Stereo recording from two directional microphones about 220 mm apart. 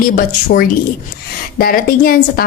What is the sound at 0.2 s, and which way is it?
A woman's voice, 40° left (ahead or behind).